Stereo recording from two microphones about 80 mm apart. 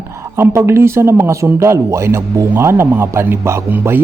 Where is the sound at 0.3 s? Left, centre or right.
Right.